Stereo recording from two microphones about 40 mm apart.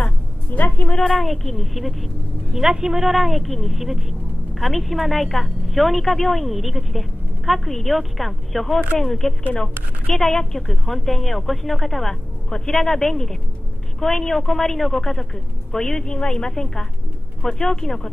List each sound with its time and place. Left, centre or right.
0.0 s a sound: left
1.0 s a woman's voice: centre
2.5 s a woman's voice: centre